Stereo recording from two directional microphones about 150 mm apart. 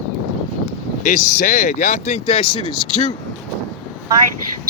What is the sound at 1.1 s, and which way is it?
Speech, 55° left (ahead or behind).